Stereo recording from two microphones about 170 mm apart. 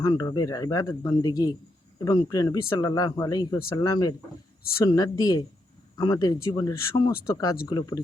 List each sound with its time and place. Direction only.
0.0 s speech: 20° left (ahead or behind)